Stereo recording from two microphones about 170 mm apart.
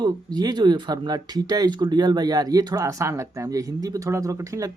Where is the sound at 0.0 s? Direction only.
25° right (ahead or behind).